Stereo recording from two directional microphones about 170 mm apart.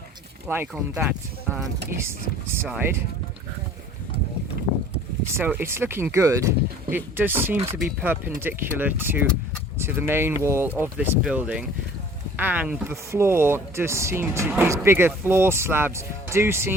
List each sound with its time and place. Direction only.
0.4 s speech: 15° right (ahead or behind)
1.9 s speech: 15° right (ahead or behind)
5.3 s speech: 10° right (ahead or behind)